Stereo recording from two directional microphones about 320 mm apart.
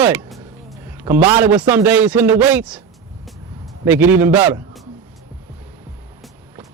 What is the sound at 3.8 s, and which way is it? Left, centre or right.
A man's voice, centre.